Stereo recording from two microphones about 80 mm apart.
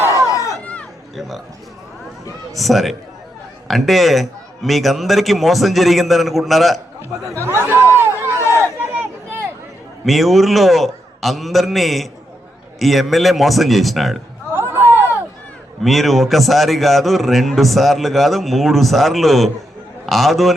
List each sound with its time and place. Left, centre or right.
0.0 s chatter: right
0.3 s chatter: left
0.6 s a sound: centre
2.6 s a man's voice: centre
7.4 s speech: right
8.5 s a sound: right
10.1 s a man's voice: centre
14.5 s a sound: right
15.8 s a man's voice: centre